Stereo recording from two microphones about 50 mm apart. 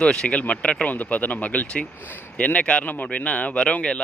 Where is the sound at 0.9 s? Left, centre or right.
Left.